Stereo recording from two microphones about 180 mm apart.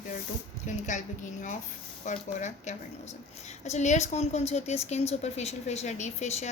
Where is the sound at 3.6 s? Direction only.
40° left (ahead or behind).